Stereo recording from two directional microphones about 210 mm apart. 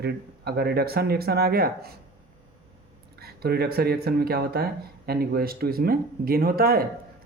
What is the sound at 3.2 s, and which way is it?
Speech, 50° right (ahead or behind).